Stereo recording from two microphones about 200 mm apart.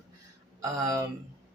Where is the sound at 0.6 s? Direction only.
15° right (ahead or behind).